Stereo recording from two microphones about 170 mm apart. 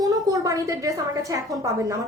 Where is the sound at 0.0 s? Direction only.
20° right (ahead or behind).